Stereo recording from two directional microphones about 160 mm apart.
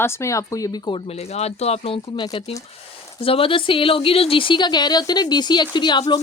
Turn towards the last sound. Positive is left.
turn(degrees=25)  # may be behind; listen again after turning